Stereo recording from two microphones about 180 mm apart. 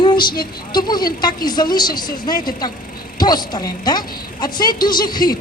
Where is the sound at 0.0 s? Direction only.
25° left (ahead or behind).